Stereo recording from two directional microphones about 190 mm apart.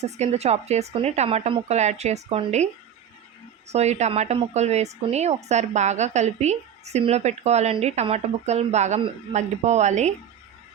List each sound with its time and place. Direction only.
0.0 s a woman's voice: 35° right (ahead or behind)
3.7 s a woman's voice: 35° right (ahead or behind)